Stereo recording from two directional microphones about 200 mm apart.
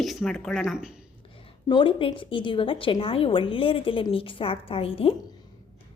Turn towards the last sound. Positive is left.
turn(degrees=30)  # may be behind; listen again after turning